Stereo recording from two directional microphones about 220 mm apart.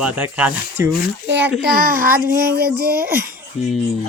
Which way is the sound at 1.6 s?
40° right (ahead or behind).